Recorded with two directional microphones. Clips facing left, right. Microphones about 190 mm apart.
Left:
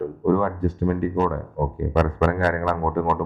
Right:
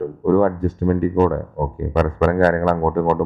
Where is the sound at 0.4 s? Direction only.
45° right (ahead or behind).